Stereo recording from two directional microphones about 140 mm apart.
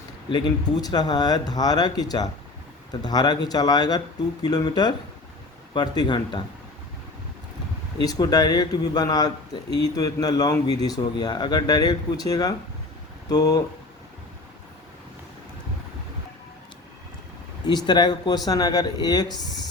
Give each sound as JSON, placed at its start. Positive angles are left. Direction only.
{"t": 0.3, "sound": "speech", "side_deg": 30}
{"t": 8.0, "sound": "speech", "side_deg": 25}
{"t": 17.8, "sound": "speech", "side_deg": 30}